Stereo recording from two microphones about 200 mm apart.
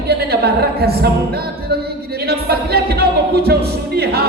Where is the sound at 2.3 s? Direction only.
50° right (ahead or behind).